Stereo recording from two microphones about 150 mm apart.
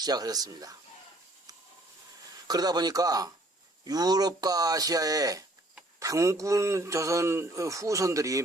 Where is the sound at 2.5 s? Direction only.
25° right (ahead or behind).